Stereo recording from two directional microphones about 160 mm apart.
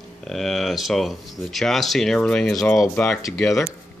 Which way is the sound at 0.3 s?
Centre (ahead or behind).